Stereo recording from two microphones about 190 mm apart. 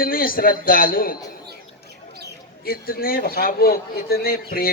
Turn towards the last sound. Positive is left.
turn(degrees=55)  # may be behind; listen again after turning